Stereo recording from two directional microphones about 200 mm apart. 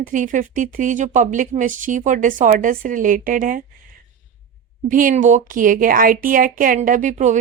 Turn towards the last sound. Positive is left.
turn(degrees=-35)  # may be behind; listen again after turning